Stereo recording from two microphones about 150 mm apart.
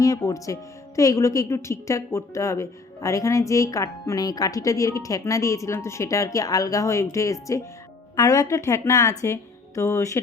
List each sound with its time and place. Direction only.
0.0 s a woman's voice: 20° left (ahead or behind)